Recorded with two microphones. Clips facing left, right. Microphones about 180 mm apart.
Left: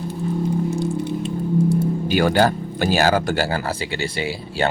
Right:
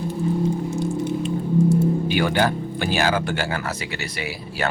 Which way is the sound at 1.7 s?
40° left (ahead or behind).